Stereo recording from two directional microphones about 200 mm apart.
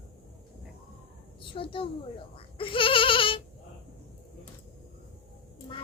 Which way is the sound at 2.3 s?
25° left (ahead or behind).